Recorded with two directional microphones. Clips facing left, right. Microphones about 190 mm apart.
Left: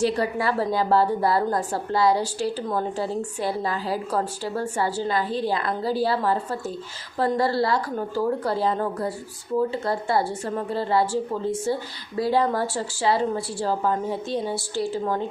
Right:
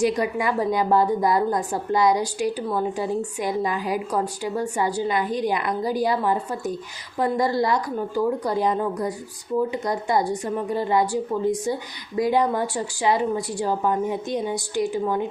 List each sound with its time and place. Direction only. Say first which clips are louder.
0.0 s a woman's voice: right 1 dB; 15° right (ahead or behind)